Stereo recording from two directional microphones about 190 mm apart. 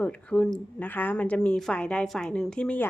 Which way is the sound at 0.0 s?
5° left (ahead or behind).